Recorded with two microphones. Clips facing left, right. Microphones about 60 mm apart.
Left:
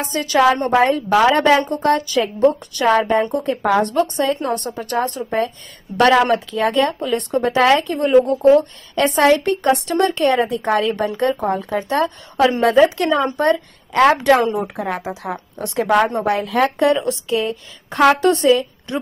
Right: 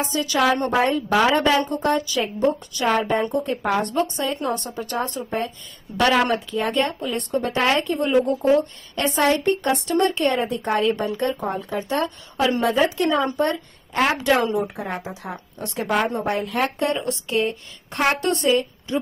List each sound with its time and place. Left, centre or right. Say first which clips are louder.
0.0 s a woman's voice: left 5 dB; left
2.7 s a woman's voice: left 5 dB; left
3.3 s speech: left 5 dB; left
4.4 s a woman's voice: left 3 dB; left
4.7 s a woman's voice: left 5 dB; left
5.9 s a woman's voice: left 5 dB; left
6.5 s a woman's voice: left 5 dB; left
14.4 s a woman's voice: left 3 dB; left
18.0 s a woman's voice: left 8 dB; left